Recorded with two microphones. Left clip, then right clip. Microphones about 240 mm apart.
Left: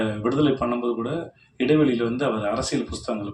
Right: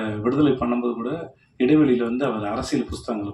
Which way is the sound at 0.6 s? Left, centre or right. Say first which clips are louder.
Even; left.